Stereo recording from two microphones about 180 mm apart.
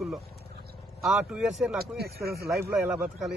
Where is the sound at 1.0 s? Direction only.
5° right (ahead or behind).